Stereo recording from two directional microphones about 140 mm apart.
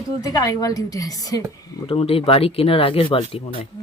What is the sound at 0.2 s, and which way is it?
Speech, 25° left (ahead or behind).